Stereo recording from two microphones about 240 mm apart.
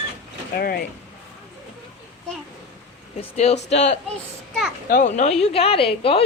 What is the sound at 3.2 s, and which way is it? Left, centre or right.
Speech, left.